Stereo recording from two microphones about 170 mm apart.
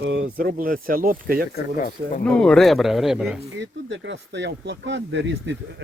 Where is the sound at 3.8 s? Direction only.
90° right.